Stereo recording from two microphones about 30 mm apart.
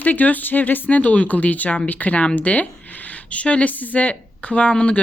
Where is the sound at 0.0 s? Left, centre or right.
Left.